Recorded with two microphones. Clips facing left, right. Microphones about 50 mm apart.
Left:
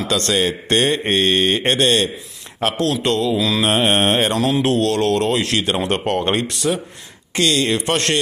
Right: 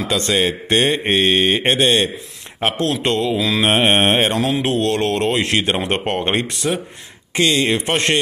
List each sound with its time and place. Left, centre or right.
0.1 s speech: centre
2.8 s a man's voice: right
3.3 s mantra: centre